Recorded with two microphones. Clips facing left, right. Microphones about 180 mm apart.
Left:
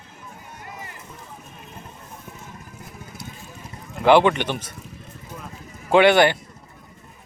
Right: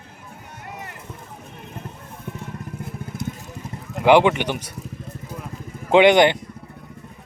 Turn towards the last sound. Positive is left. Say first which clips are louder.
# right 2 dB
turn(degrees=-20)  # may be behind; listen again after turning